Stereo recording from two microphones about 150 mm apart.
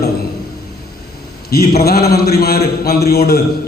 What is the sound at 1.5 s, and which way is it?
A man's voice, 90° left.